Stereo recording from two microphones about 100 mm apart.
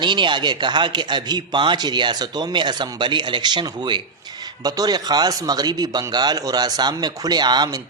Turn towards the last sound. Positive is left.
turn(degrees=-40)  # may be behind; listen again after turning